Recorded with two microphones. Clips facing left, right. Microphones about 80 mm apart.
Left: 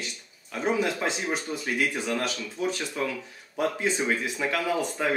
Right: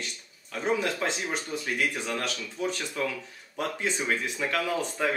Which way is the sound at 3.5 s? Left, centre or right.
Centre.